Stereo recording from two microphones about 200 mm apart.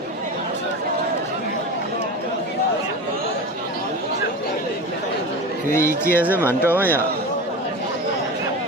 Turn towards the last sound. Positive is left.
turn(degrees=-10)  # may be behind; listen again after turning